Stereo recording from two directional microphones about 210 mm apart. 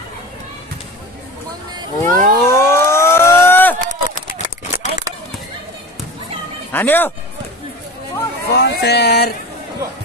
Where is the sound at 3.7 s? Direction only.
40° right (ahead or behind).